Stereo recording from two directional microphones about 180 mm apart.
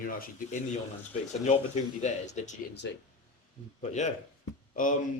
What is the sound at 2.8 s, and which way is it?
Speech, 80° left.